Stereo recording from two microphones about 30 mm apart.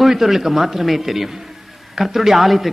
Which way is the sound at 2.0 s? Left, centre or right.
Centre.